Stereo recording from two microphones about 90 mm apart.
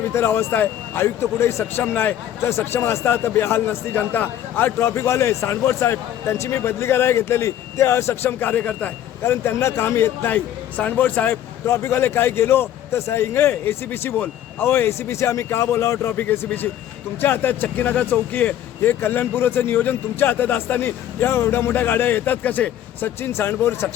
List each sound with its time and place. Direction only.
0.1 s a man's voice: 25° left (ahead or behind)
9.2 s a man's voice: 30° left (ahead or behind)